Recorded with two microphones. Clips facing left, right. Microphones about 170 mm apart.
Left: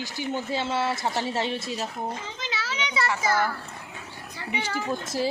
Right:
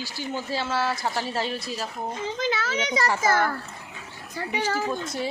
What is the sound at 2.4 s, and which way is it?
A child's voice, 50° right (ahead or behind).